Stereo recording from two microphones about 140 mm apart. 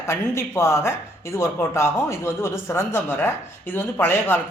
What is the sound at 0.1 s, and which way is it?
A man's voice, 20° left (ahead or behind).